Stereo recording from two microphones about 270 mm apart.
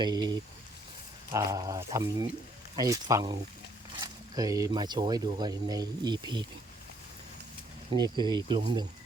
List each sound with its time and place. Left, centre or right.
0.0 s speech: centre
7.9 s speech: centre